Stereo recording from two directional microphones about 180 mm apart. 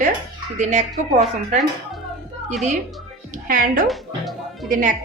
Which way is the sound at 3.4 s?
50° right (ahead or behind).